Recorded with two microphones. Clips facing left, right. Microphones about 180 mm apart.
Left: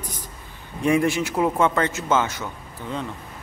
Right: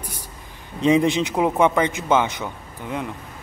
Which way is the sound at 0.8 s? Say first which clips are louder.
Right 3 dB; 20° right (ahead or behind).